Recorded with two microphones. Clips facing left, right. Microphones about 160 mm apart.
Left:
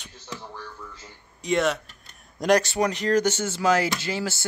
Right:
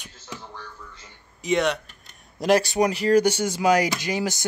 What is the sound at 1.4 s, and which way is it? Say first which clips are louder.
Speech: right 1 dB; centre (ahead or behind).